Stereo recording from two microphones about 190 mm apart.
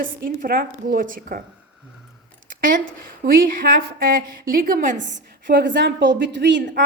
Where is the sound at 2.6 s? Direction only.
45° right (ahead or behind).